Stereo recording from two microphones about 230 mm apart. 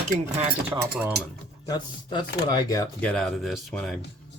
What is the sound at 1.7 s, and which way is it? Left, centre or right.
Speech, centre.